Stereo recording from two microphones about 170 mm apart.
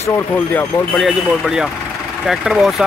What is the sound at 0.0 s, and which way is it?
Speech, 10° left (ahead or behind).